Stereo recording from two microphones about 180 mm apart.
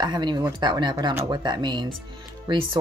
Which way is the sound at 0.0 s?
25° right (ahead or behind).